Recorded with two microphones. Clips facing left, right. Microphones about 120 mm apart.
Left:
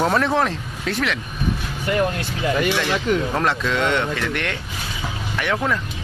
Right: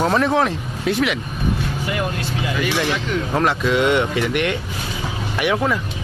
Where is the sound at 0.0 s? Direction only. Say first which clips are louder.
Right 2 dB; centre (ahead or behind).